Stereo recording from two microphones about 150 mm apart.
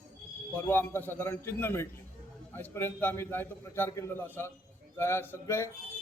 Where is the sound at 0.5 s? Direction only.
15° left (ahead or behind).